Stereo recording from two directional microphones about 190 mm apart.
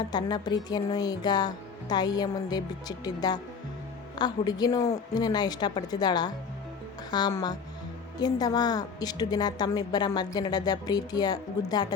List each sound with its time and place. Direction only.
0.1 s a woman's voice: 20° left (ahead or behind)